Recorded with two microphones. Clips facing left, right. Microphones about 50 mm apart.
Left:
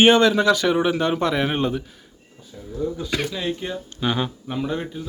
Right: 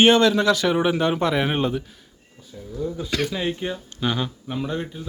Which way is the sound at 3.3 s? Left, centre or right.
Centre.